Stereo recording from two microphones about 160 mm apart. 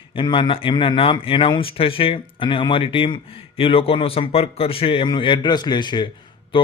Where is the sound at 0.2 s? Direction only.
30° left (ahead or behind).